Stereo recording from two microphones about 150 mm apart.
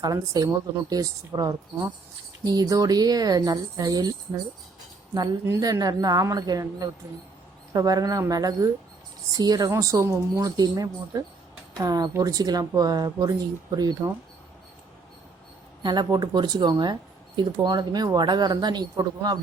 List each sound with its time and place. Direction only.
0.0 s a woman's voice: 25° right (ahead or behind)
5.1 s a woman's voice: 25° right (ahead or behind)
15.8 s a woman's voice: 30° right (ahead or behind)